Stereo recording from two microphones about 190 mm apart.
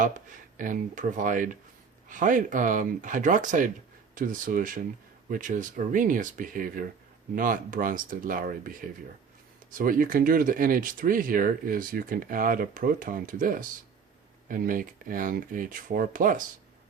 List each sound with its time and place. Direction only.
0.5 s speech: 45° right (ahead or behind)